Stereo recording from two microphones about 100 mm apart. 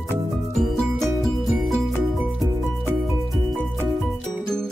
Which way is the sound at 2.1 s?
5° right (ahead or behind).